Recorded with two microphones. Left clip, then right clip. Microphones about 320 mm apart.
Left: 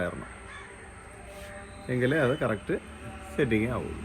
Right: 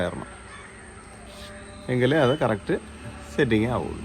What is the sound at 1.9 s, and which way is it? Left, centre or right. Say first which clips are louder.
Speech: right 5 dB; centre.